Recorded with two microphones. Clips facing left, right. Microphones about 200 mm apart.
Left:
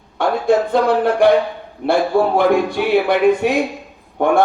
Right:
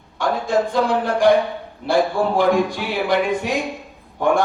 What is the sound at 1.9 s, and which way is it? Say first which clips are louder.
Speech: left 3 dB; 60° left (ahead or behind).